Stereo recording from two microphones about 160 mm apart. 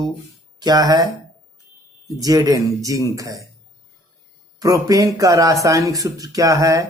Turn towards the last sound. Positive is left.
turn(degrees=-20)  # may be behind; listen again after turning